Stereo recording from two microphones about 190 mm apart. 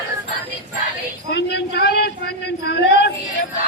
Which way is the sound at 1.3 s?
65° left (ahead or behind).